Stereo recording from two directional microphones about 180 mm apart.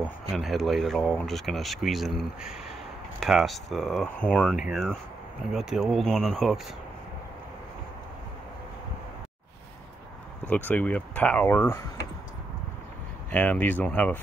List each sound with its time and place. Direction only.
0.0 s speech: centre (ahead or behind)
10.5 s speech: 10° left (ahead or behind)
13.3 s speech: 10° left (ahead or behind)